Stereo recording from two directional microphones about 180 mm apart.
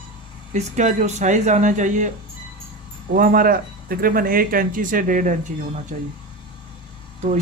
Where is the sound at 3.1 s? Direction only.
50° right (ahead or behind).